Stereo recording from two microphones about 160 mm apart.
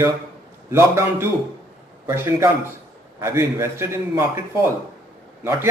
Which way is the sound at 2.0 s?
15° right (ahead or behind).